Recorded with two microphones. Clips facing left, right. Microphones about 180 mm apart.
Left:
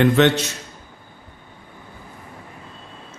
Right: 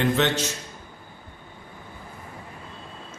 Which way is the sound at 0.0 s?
65° left (ahead or behind).